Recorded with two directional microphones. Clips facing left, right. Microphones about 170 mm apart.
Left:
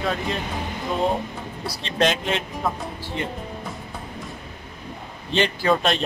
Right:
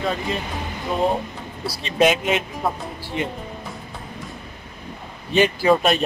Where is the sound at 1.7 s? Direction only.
10° right (ahead or behind).